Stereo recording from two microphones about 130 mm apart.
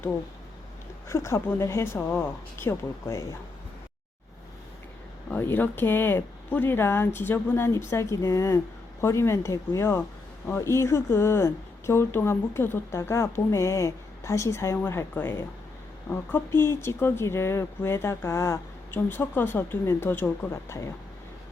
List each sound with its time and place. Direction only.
1.0 s speech: 20° left (ahead or behind)
5.3 s speech: 15° left (ahead or behind)